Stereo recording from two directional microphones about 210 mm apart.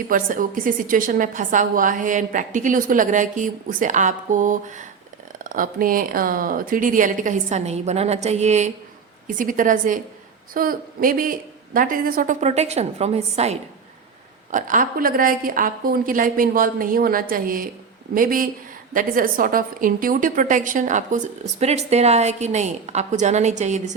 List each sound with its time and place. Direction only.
0.1 s a woman's voice: 40° right (ahead or behind)